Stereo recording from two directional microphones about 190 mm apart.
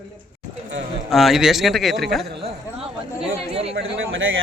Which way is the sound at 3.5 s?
30° right (ahead or behind).